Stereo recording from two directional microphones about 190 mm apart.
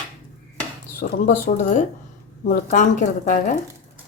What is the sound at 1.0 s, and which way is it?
Speech, 45° left (ahead or behind).